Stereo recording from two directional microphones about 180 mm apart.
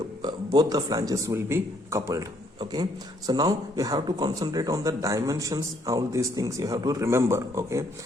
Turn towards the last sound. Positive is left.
turn(degrees=-15)  # may be behind; listen again after turning